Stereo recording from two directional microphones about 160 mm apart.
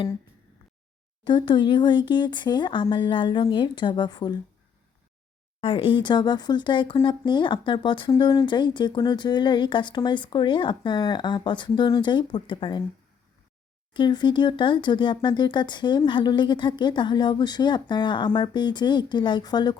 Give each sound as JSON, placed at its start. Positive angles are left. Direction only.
{"t": 1.2, "sound": "speech", "side_deg": 30}
{"t": 5.5, "sound": "speech", "side_deg": 35}
{"t": 13.9, "sound": "speech", "side_deg": 30}